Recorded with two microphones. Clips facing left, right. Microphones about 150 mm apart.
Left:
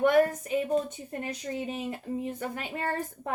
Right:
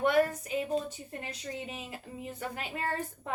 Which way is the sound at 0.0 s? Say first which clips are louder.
Left 4 dB; 45° left (ahead or behind).